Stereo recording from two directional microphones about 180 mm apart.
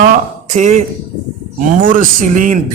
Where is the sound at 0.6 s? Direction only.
40° right (ahead or behind).